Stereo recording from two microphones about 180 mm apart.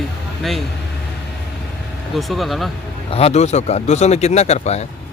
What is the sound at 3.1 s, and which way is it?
Speech, 35° left (ahead or behind).